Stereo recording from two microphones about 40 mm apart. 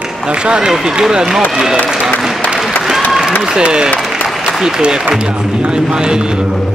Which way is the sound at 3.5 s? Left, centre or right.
Right.